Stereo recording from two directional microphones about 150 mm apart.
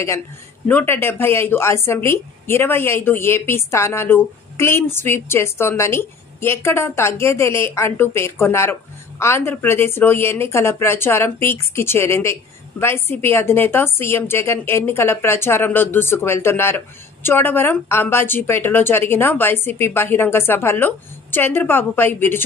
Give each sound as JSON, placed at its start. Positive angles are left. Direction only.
{"t": 0.7, "sound": "speech", "side_deg": 15}